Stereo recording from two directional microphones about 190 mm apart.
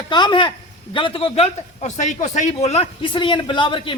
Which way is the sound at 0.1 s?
25° left (ahead or behind).